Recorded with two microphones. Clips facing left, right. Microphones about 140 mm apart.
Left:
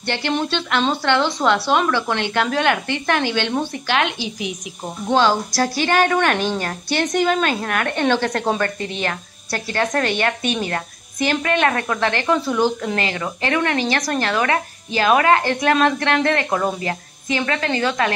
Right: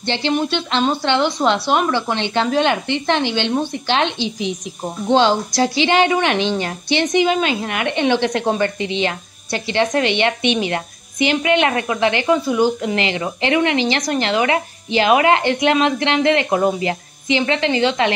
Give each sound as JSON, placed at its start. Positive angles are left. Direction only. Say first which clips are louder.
{"t": 0.0, "sound": "a woman's voice", "louder": "right 3 dB", "side_deg": -20}
{"t": 8.7, "sound": "speech", "louder": "right 5 dB", "side_deg": -90}
{"t": 9.0, "sound": "a woman's voice", "louder": "right 3 dB", "side_deg": -20}